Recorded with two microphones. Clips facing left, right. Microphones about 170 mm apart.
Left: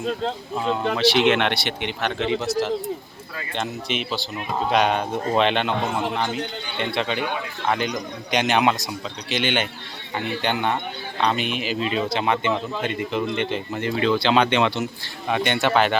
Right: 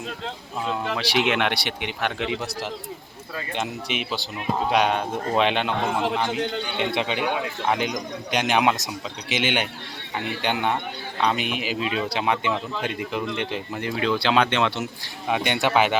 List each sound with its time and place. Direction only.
0.5 s speech: centre (ahead or behind)
3.5 s speech: 10° right (ahead or behind)
6.7 s speech: 15° right (ahead or behind)